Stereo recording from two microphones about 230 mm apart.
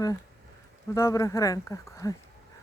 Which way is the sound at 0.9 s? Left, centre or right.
Centre.